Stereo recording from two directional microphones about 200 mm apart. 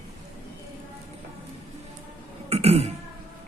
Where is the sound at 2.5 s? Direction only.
30° right (ahead or behind).